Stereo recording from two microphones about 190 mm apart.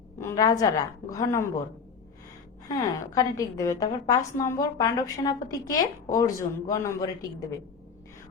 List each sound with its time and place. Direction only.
0.2 s a woman's voice: 15° left (ahead or behind)
2.6 s a woman's voice: 20° left (ahead or behind)